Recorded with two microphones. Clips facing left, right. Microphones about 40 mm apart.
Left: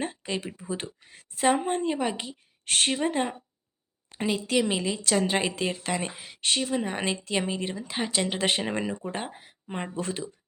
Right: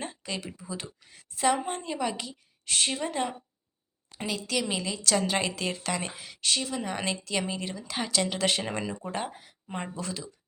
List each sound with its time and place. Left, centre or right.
0.0 s a woman's voice: left
2.6 s a woman's voice: left
9.3 s a sound: left
9.9 s speech: left